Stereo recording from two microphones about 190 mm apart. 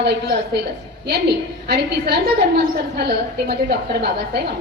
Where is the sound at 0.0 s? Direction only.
60° right (ahead or behind).